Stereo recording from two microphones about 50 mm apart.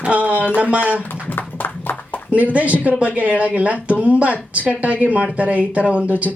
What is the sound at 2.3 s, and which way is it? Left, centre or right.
A woman's voice, right.